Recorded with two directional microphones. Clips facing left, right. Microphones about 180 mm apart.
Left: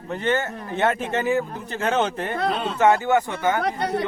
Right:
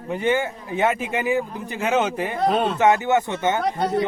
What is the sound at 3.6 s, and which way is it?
Speech, 65° left (ahead or behind).